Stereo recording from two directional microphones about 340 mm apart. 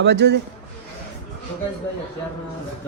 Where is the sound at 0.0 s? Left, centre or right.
Right.